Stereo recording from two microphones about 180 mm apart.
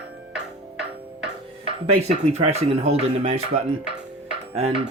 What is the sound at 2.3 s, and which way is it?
Speech, 35° right (ahead or behind).